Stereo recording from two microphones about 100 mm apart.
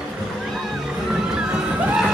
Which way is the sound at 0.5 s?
5° right (ahead or behind).